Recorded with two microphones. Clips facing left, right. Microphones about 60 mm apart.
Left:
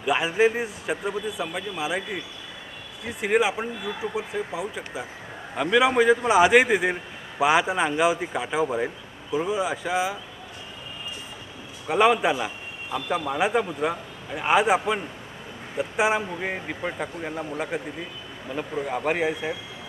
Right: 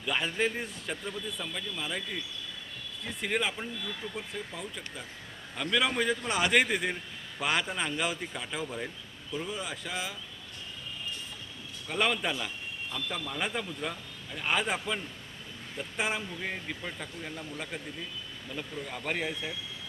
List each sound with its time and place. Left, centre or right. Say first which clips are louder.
0.0 s a man's voice: left 9 dB; centre
11.9 s a man's voice: left 10 dB; centre
16.2 s speech: left 7 dB; left